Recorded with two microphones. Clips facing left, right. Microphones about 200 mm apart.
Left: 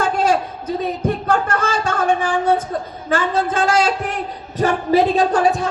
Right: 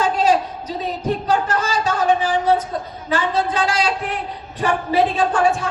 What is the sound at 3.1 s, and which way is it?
A man's voice, 50° left (ahead or behind).